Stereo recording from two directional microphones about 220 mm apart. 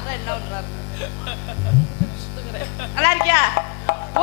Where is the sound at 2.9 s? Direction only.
15° left (ahead or behind).